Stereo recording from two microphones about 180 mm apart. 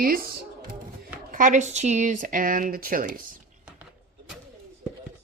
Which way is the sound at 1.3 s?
45° right (ahead or behind).